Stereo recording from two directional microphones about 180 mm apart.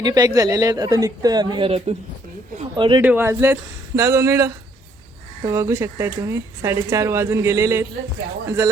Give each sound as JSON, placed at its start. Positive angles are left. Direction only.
{"t": 0.0, "sound": "speech", "side_deg": -20}
{"t": 3.0, "sound": "speech", "side_deg": -10}